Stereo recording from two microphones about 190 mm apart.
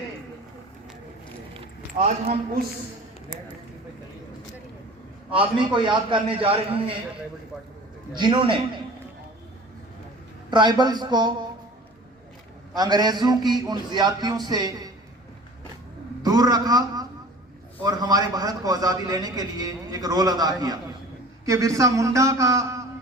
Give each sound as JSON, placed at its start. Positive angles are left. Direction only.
{"t": 2.0, "sound": "a man's voice", "side_deg": -35}
{"t": 5.3, "sound": "a man's voice", "side_deg": -25}
{"t": 8.1, "sound": "a man's voice", "side_deg": -25}
{"t": 10.5, "sound": "a man's voice", "side_deg": -25}
{"t": 12.7, "sound": "a man's voice", "side_deg": -20}
{"t": 16.2, "sound": "a man's voice", "side_deg": -20}